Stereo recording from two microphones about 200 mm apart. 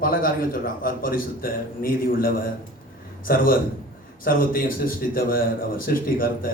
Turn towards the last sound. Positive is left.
turn(degrees=45)  # may be behind; listen again after turning